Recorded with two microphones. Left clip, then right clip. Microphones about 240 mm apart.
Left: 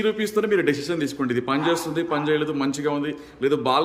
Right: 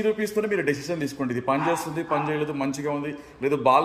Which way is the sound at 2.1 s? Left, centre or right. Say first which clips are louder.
Left 2 dB; left.